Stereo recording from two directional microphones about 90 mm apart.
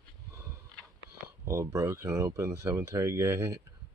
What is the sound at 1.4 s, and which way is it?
Speech, 30° right (ahead or behind).